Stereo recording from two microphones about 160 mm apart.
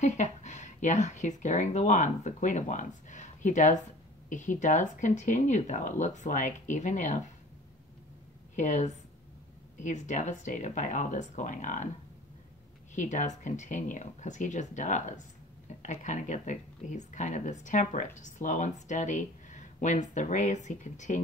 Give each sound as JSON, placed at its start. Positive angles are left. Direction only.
{"t": 0.0, "sound": "speech", "side_deg": 50}
{"t": 8.5, "sound": "speech", "side_deg": 45}
{"t": 12.9, "sound": "speech", "side_deg": 50}